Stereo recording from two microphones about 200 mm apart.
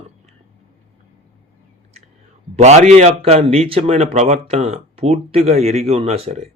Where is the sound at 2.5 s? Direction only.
35° right (ahead or behind).